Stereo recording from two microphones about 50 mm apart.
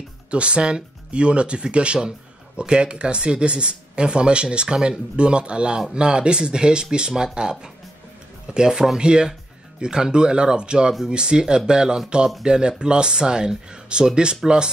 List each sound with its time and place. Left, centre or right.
0.3 s speech: right